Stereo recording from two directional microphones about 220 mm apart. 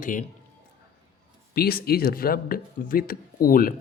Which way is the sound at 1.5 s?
45° left (ahead or behind).